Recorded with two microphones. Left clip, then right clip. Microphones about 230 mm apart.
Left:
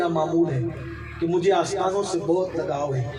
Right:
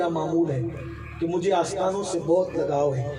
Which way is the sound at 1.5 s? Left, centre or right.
Right.